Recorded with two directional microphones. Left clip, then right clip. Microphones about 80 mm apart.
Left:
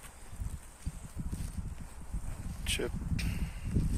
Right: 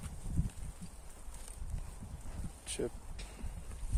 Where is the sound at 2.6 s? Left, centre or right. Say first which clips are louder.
Left 5 dB; right.